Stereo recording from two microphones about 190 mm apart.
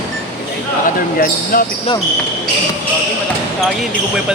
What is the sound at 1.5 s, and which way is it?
Speech, 50° left (ahead or behind).